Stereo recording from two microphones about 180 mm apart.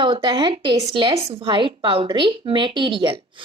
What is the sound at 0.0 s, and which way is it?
A woman's voice, 25° right (ahead or behind).